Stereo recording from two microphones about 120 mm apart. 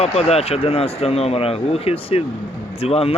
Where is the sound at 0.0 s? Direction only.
60° left (ahead or behind).